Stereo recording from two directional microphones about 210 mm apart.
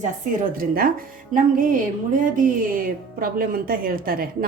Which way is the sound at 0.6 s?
45° right (ahead or behind).